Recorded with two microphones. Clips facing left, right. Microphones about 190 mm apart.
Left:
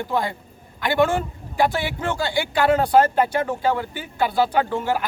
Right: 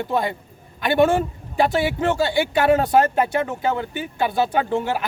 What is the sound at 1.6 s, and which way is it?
Speech, 25° right (ahead or behind).